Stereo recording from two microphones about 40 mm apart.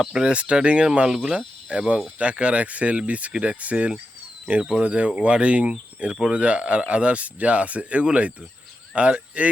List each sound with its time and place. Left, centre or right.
0.0 s speech: centre
0.3 s speech: right
1.0 s speech: centre
1.3 s cricket: right
2.1 s speech: right